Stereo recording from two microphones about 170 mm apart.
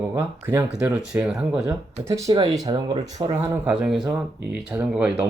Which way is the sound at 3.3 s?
10° right (ahead or behind).